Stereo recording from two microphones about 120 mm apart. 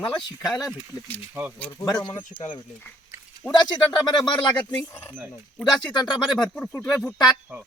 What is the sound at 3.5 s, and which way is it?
Speech, 40° left (ahead or behind).